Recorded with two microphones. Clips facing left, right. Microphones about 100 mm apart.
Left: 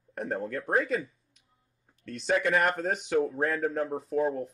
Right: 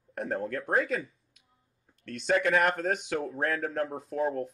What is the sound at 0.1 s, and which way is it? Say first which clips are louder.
Speech: even; centre (ahead or behind).